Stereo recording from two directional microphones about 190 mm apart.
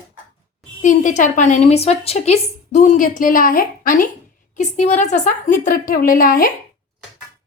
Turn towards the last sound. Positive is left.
turn(degrees=45)  # may be behind; listen again after turning